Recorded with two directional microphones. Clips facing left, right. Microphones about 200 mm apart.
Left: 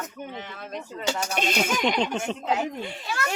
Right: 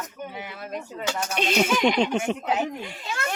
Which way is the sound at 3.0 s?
25° right (ahead or behind).